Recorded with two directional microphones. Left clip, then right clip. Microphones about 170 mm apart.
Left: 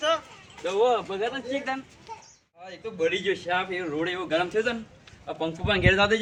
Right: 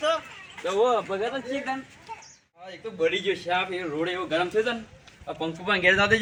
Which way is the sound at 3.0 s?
25° left (ahead or behind).